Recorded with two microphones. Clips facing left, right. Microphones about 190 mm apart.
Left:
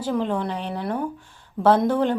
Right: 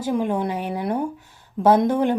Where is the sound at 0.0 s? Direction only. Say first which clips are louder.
Right 2 dB; 15° right (ahead or behind).